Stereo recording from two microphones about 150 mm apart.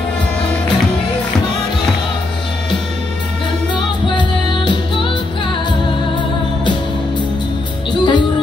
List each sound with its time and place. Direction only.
3.7 s music: 30° left (ahead or behind)
7.9 s music: 30° left (ahead or behind)